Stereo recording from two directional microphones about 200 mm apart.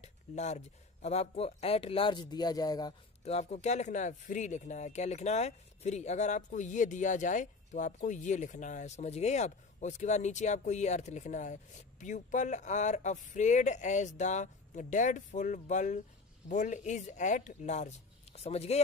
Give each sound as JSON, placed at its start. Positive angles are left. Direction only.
{"t": 0.0, "sound": "speech", "side_deg": 35}
{"t": 3.3, "sound": "speech", "side_deg": 35}